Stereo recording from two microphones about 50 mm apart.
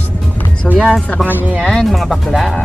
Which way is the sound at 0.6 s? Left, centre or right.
Centre.